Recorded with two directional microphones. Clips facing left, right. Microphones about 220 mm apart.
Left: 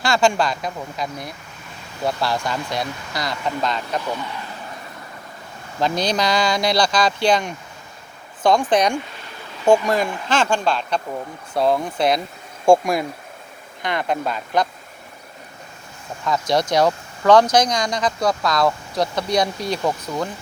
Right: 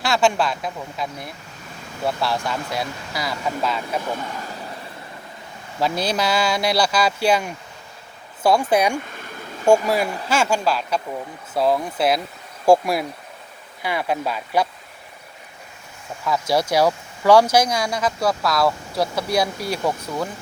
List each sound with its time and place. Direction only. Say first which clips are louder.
0.0 s speech: left 1 dB; 5° right (ahead or behind)
4.3 s vehicle: right 1 dB; 40° right (ahead or behind)
5.8 s speech: left 1 dB; 5° right (ahead or behind)
16.2 s speech: left 1 dB; 5° right (ahead or behind)